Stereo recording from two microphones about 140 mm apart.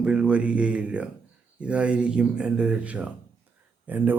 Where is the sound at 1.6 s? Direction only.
10° right (ahead or behind).